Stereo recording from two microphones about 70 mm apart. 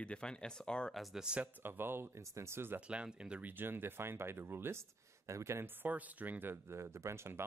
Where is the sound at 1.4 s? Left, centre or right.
Right.